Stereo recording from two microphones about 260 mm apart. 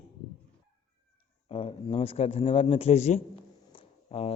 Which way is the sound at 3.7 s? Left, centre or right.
Left.